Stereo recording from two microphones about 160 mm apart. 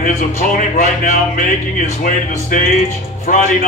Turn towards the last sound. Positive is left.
turn(degrees=55)  # may be behind; listen again after turning